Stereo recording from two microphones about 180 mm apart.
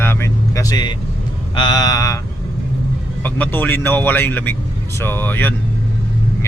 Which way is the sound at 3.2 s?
10° left (ahead or behind).